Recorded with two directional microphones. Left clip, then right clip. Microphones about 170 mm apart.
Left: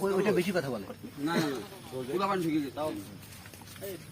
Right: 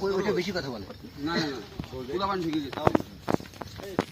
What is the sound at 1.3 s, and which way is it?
Speech, 10° left (ahead or behind).